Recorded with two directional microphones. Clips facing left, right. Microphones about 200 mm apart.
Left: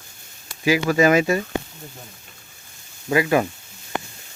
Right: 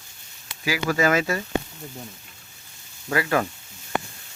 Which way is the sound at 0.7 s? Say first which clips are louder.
Left 5 dB; 20° left (ahead or behind).